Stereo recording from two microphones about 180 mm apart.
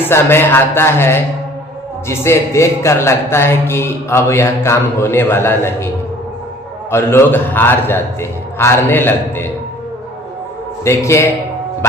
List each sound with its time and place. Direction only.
0.0 s a man's voice: 15° left (ahead or behind)
6.9 s a man's voice: 15° left (ahead or behind)
10.8 s a man's voice: 15° left (ahead or behind)